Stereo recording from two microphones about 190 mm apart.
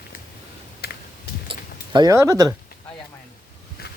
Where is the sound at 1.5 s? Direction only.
20° right (ahead or behind).